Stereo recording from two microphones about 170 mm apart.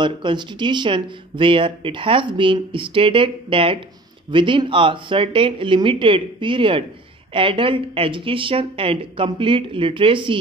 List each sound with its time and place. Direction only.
0.0 s speech: 30° right (ahead or behind)